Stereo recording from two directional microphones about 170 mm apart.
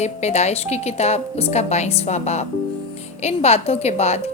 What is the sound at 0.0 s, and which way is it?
A woman's voice, 40° left (ahead or behind).